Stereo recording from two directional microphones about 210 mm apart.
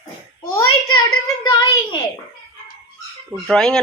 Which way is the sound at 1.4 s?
20° left (ahead or behind).